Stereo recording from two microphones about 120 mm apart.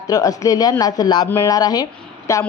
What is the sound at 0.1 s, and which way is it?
Speech, 30° left (ahead or behind).